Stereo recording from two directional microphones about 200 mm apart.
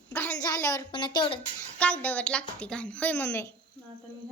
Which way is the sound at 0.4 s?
15° left (ahead or behind).